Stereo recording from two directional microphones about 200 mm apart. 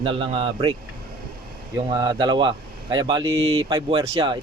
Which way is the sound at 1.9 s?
20° right (ahead or behind).